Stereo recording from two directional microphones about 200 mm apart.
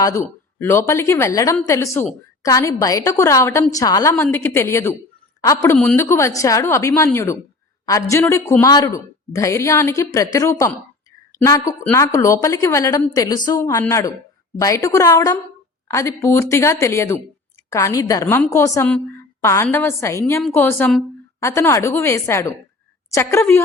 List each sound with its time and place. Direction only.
0.0 s a woman's voice: 15° left (ahead or behind)